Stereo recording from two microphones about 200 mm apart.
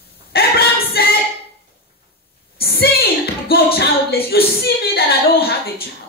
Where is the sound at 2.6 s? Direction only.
50° left (ahead or behind).